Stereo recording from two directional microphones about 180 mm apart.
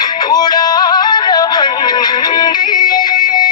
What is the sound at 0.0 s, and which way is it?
Music, 20° left (ahead or behind).